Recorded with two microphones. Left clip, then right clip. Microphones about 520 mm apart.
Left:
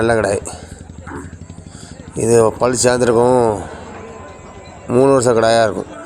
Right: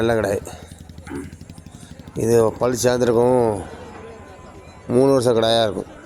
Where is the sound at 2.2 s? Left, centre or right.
Right.